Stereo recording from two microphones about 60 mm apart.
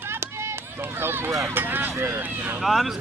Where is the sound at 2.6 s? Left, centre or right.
Centre.